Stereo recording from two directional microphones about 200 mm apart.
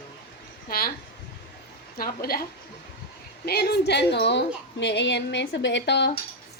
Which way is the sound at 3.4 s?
55° left (ahead or behind).